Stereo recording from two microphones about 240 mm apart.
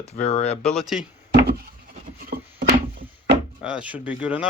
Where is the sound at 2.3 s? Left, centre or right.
Right.